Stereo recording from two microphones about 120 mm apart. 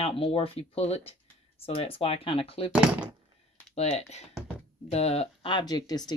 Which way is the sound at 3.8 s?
65° left (ahead or behind).